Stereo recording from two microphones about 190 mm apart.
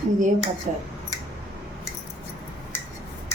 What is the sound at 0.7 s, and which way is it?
Speech, 45° right (ahead or behind).